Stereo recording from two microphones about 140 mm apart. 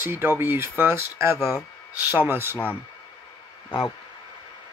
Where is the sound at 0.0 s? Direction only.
15° right (ahead or behind).